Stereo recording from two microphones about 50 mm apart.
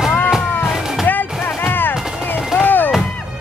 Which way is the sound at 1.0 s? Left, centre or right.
Left.